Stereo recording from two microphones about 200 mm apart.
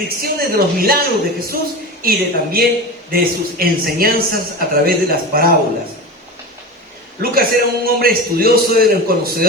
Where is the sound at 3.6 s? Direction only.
50° right (ahead or behind).